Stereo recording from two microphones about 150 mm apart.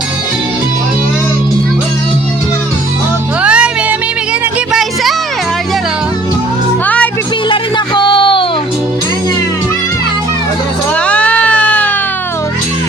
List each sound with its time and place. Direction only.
3.4 s music: 5° right (ahead or behind)
6.8 s music: 10° left (ahead or behind)
7.5 s music: 35° left (ahead or behind)
11.0 s music: 10° left (ahead or behind)